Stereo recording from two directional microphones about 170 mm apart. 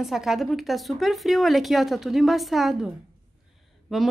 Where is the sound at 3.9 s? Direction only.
Centre (ahead or behind).